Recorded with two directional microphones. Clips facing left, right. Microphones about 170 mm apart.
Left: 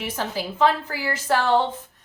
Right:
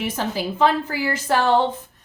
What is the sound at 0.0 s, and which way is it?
A woman's voice, 20° right (ahead or behind).